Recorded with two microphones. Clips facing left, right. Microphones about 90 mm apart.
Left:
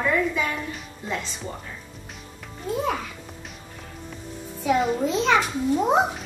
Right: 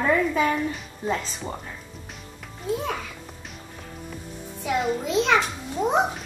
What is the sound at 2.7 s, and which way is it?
Music, centre (ahead or behind).